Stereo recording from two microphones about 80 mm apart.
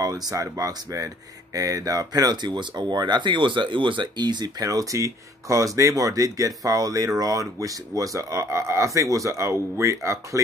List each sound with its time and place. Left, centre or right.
0.0 s speech: right
4.6 s speech: right